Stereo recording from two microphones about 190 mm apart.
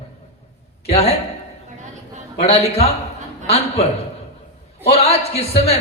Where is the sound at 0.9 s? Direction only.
35° left (ahead or behind).